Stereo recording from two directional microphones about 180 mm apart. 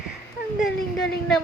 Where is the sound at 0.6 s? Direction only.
Centre (ahead or behind).